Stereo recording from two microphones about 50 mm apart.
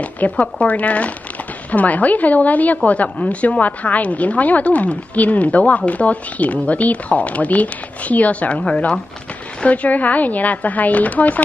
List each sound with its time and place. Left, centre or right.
0.0 s a woman's voice: left